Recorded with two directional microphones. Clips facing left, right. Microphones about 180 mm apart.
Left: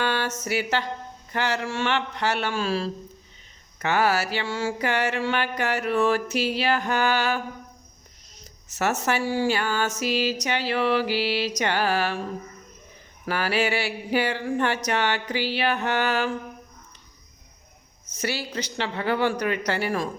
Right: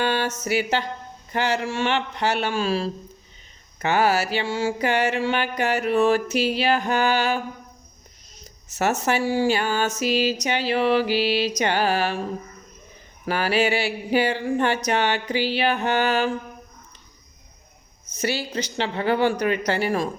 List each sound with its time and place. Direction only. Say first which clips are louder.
0.0 s a sound: right 3 dB; 20° right (ahead or behind)
1.3 s a man's voice: right 3 dB; 20° right (ahead or behind)
3.8 s mantra: right 2 dB; 20° right (ahead or behind)
8.8 s mantra: right 2 dB; 20° right (ahead or behind)
13.2 s mantra: right 3 dB; 20° right (ahead or behind)
18.2 s mantra: right 3 dB; 25° right (ahead or behind)